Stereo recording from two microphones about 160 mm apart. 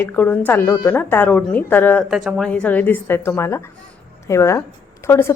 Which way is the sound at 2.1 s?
5° right (ahead or behind).